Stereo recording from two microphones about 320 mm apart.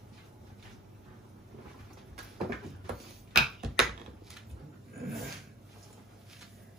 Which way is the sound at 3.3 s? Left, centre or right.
Centre.